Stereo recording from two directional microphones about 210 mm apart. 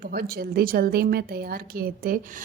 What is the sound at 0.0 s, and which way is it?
A woman's voice, 45° right (ahead or behind).